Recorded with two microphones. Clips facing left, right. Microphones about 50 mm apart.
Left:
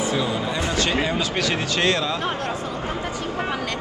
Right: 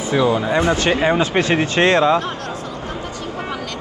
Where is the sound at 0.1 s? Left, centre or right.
Right.